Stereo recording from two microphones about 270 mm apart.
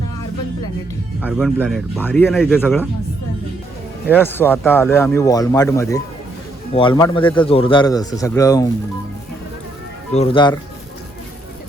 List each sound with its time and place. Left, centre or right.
1.2 s speech: centre
4.1 s speech: centre
10.2 s speech: centre